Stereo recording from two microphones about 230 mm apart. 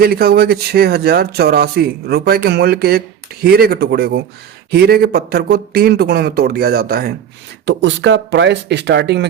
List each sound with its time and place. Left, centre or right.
0.0 s speech: right